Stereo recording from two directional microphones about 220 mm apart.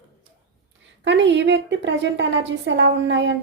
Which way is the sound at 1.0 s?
55° right (ahead or behind).